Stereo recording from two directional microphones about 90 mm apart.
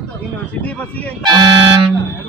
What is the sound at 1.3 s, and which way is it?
Speech, 60° right (ahead or behind).